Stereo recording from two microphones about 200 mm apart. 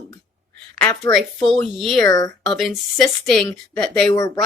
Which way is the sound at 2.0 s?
20° left (ahead or behind).